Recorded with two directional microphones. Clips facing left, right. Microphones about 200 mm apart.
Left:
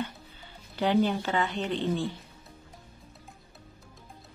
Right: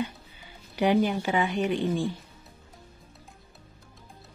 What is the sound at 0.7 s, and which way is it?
Speech, 10° right (ahead or behind).